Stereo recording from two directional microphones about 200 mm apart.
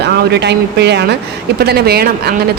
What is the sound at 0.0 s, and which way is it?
A woman's voice, 55° right (ahead or behind).